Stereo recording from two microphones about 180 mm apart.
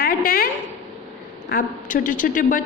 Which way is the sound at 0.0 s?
55° left (ahead or behind).